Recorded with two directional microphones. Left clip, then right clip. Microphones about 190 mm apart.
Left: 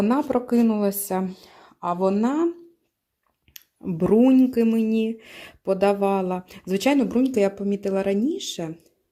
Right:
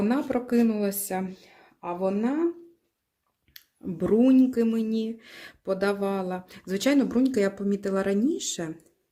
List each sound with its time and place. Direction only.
0.0 s speech: 25° left (ahead or behind)
3.5 s speech: 25° left (ahead or behind); by 8.7 s 10° left (ahead or behind)